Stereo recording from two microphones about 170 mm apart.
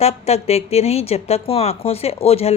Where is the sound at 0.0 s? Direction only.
40° left (ahead or behind).